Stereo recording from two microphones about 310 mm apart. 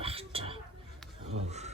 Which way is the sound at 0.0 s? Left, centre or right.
Centre.